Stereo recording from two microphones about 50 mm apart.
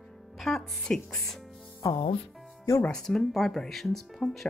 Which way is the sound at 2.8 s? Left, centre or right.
Centre.